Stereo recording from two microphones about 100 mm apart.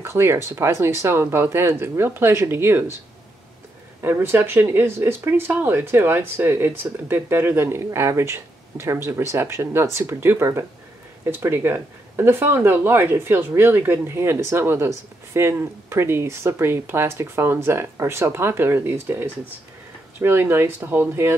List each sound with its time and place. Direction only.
0.0 s speech: 25° right (ahead or behind)
4.0 s speech: 25° right (ahead or behind)